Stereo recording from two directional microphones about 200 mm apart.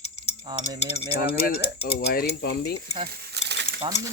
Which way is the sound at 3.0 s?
55° right (ahead or behind).